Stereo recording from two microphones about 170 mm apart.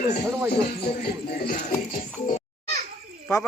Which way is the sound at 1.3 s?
65° left (ahead or behind).